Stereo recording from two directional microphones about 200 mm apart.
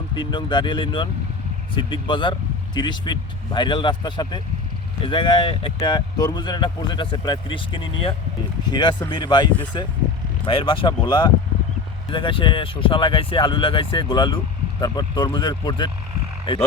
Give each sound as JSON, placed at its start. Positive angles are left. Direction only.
{"t": 0.1, "sound": "speech", "side_deg": 20}